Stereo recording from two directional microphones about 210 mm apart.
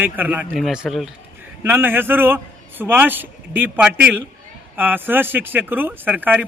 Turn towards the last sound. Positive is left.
turn(degrees=-10)  # may be behind; listen again after turning